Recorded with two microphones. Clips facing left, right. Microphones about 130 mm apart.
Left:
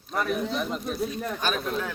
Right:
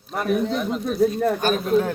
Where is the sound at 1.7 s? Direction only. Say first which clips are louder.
Right 10 dB; 45° right (ahead or behind).